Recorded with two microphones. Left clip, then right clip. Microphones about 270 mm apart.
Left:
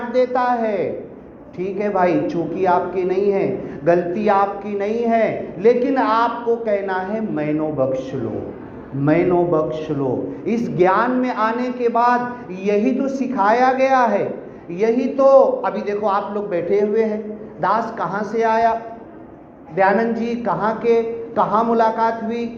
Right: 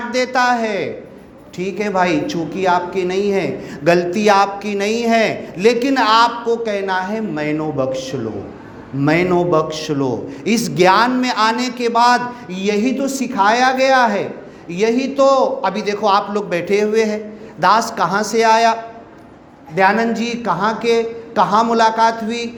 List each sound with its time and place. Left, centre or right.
0.1 s a man's voice: right